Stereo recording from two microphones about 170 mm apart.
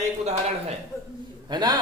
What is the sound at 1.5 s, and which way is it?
Speech, 25° right (ahead or behind).